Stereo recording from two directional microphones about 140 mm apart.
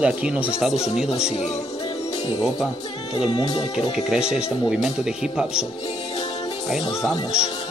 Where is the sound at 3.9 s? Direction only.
5° right (ahead or behind).